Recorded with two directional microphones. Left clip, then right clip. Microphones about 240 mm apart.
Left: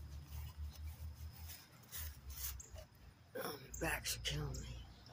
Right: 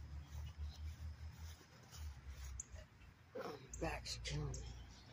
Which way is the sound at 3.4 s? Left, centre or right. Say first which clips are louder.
Left 2 dB; centre.